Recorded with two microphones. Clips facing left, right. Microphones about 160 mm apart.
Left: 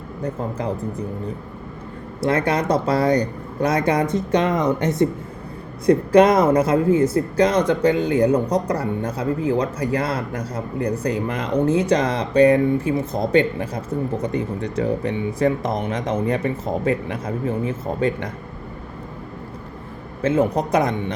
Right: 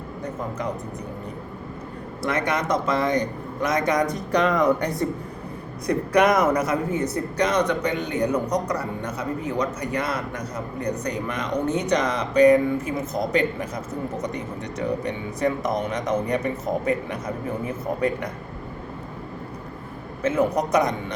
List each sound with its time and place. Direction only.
2.2 s a man's voice: 30° left (ahead or behind)
20.2 s speech: 30° left (ahead or behind)